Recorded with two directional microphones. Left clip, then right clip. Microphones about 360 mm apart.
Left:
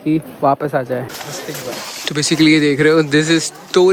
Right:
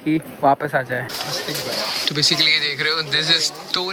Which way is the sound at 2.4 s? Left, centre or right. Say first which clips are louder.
Left 6 dB; centre.